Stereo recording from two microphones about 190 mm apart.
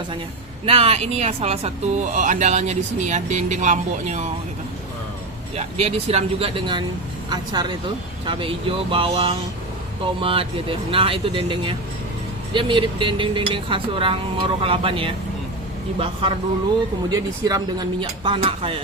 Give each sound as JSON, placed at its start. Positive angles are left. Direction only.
{"t": 0.6, "sound": "speech", "side_deg": -30}
{"t": 5.5, "sound": "speech", "side_deg": -35}
{"t": 17.1, "sound": "speech", "side_deg": -20}